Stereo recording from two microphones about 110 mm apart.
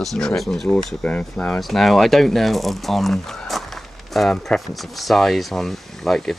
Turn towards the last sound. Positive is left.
turn(degrees=5)  # may be behind; listen again after turning